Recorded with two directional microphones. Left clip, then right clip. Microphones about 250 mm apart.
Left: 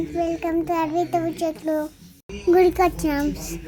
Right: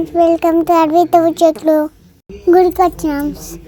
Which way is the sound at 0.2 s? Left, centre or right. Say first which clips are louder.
Right 13 dB; right.